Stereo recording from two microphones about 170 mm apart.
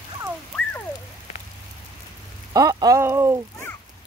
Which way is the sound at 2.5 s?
20° right (ahead or behind).